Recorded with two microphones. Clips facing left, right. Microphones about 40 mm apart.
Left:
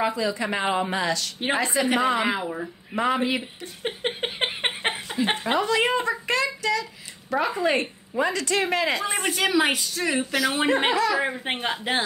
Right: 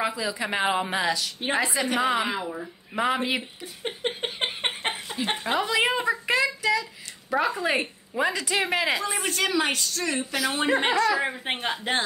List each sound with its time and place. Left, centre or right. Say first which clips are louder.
0.0 s a woman's voice: left 3 dB; centre
2.2 s speech: left 3 dB; centre
3.0 s a woman's voice: left 2 dB; centre
3.8 s a sound: left 2 dB; centre
5.4 s a sound: even; centre
7.5 s a woman's voice: left 2 dB; centre
9.1 s a woman's voice: left 3 dB; centre
10.3 s a woman's voice: left 1 dB; centre